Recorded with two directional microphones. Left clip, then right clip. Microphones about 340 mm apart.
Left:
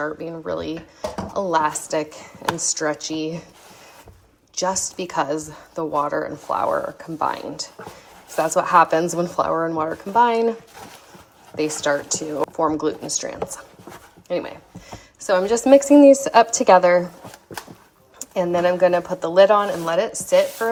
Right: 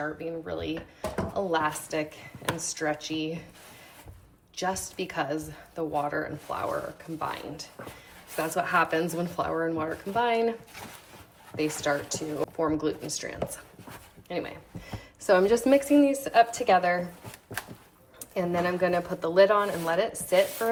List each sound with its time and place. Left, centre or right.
0.2 s speech: centre
4.5 s speech: centre
8.4 s speech: centre
11.5 s speech: centre
14.8 s speech: centre
18.3 s speech: centre